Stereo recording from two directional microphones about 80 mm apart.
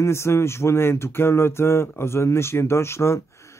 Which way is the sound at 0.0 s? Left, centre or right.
Left.